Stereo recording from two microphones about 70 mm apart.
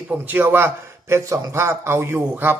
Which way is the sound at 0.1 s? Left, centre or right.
Right.